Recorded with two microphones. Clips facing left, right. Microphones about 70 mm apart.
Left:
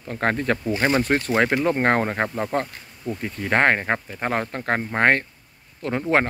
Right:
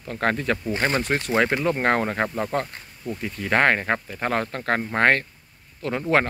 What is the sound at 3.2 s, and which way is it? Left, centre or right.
Speech, left.